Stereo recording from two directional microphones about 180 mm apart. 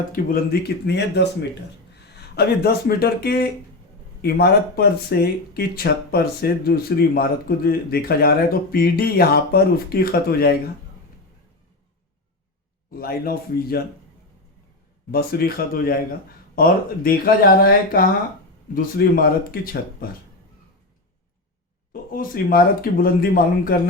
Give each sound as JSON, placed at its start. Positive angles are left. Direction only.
{"t": 0.1, "sound": "speech", "side_deg": 55}
{"t": 12.9, "sound": "speech", "side_deg": 55}
{"t": 15.1, "sound": "speech", "side_deg": 55}
{"t": 22.1, "sound": "speech", "side_deg": 55}